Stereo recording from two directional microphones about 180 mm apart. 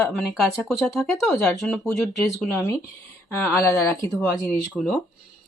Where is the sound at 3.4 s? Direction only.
15° left (ahead or behind).